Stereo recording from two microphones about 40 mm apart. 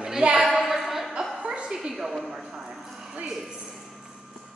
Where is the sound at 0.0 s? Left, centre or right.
Centre.